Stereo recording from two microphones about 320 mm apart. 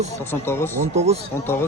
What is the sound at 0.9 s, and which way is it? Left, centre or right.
Speech, centre.